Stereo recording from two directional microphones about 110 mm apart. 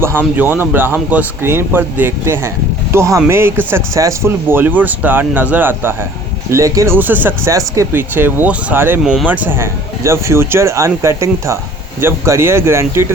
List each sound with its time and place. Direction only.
0.0 s speech: 20° right (ahead or behind)
6.9 s speech: 15° right (ahead or behind)